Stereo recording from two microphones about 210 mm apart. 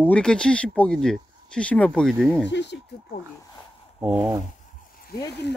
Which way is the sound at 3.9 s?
5° right (ahead or behind).